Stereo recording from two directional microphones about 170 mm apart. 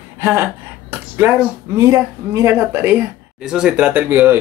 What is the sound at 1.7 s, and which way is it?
Speech, 15° right (ahead or behind).